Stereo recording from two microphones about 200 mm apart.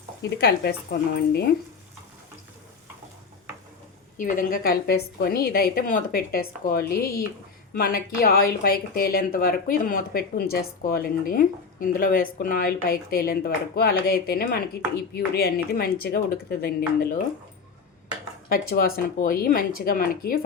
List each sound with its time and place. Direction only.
0.2 s speech: 55° left (ahead or behind)
4.2 s speech: 45° left (ahead or behind)
18.4 s speech: 45° left (ahead or behind)